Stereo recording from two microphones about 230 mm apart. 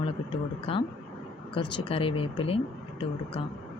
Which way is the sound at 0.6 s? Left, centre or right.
Left.